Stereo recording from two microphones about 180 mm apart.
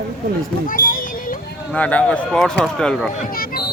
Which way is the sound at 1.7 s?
5° left (ahead or behind).